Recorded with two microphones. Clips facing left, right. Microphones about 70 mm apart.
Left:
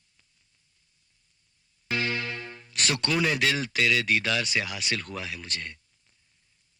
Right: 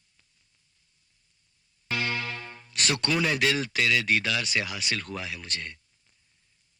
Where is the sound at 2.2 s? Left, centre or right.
Centre.